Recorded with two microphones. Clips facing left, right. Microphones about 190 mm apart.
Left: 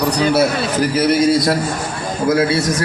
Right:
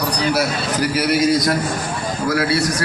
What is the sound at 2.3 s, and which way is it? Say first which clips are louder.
Speech: left 4 dB; 25° left (ahead or behind).